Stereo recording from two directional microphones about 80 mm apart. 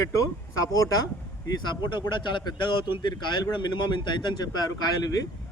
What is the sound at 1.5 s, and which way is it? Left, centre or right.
A man's voice, left.